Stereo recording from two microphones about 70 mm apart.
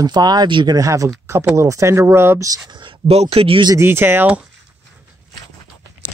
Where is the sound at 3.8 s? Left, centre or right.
Right.